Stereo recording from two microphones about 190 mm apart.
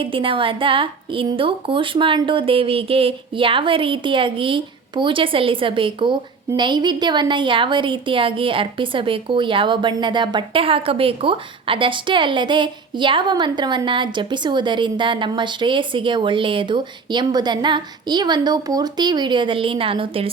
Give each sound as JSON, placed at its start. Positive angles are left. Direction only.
{"t": 0.0, "sound": "a woman's voice", "side_deg": -30}